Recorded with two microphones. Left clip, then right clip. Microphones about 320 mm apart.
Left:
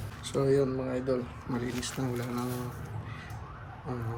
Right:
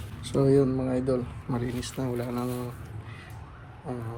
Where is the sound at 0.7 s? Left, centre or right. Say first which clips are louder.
Right 3 dB; right.